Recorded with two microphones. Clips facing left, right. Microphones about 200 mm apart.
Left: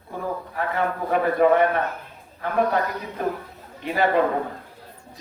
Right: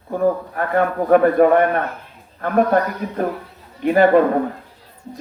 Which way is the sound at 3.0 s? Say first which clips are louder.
Right 5 dB; 50° right (ahead or behind).